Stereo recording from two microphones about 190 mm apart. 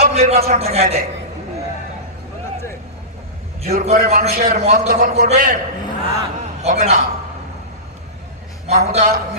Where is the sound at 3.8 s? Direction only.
40° right (ahead or behind).